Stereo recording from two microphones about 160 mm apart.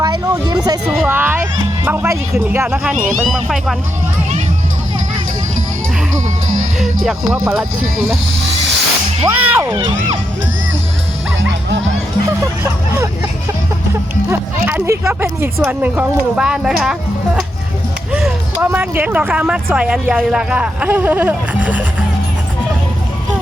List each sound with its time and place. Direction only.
0.0 s a sound: 25° right (ahead or behind)
1.0 s speech: 10° right (ahead or behind)
6.7 s speech: centre (ahead or behind)
9.2 s speech: 20° right (ahead or behind)
14.3 s speech: 15° right (ahead or behind)